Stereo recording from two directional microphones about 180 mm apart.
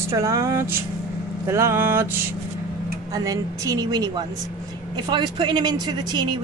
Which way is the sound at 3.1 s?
20° right (ahead or behind).